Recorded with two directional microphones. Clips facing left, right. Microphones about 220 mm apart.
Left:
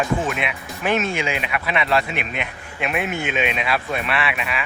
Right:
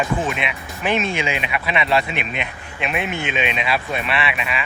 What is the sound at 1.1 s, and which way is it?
Speech, 45° left (ahead or behind).